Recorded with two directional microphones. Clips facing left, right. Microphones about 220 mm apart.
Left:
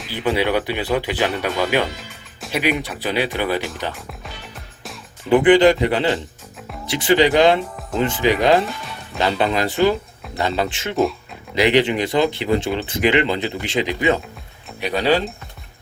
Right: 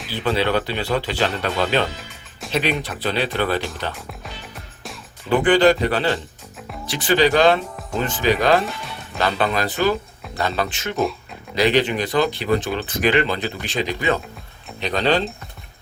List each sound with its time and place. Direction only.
0.1 s speech: 15° left (ahead or behind)
3.9 s speech: centre (ahead or behind)
5.3 s speech: 20° left (ahead or behind)